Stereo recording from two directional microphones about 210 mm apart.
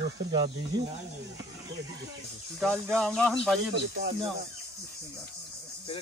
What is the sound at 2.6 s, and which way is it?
Speech, centre (ahead or behind).